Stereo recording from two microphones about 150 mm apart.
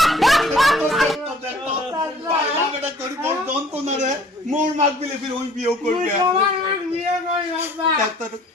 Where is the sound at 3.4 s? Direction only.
50° right (ahead or behind).